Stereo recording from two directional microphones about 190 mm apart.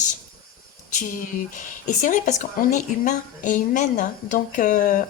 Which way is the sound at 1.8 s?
40° left (ahead or behind).